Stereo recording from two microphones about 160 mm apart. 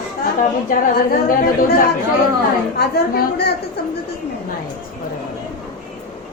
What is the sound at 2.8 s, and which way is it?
Speech, 85° left.